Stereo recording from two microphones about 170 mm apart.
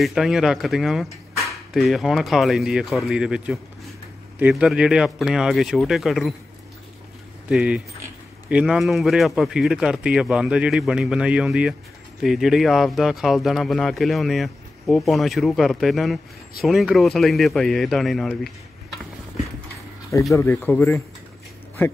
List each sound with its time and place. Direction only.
0.0 s speech: centre (ahead or behind)
7.4 s speech: 5° right (ahead or behind)
20.3 s speech: 15° left (ahead or behind)